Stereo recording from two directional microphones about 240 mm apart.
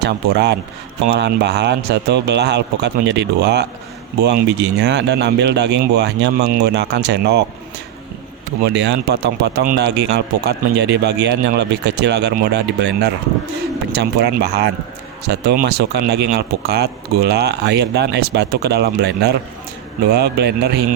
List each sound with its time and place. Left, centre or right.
0.0 s speech: right
8.6 s speech: right